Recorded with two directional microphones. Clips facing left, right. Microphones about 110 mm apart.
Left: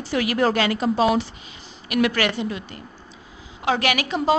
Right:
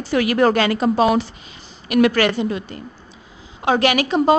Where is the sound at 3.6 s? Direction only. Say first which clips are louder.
Right 5 dB; 30° right (ahead or behind).